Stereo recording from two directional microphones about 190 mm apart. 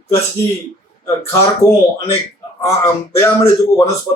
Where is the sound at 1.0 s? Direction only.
15° left (ahead or behind).